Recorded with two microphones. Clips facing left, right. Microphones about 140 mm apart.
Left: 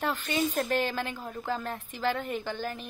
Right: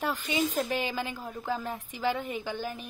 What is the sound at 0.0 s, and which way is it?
A child's voice, 10° right (ahead or behind).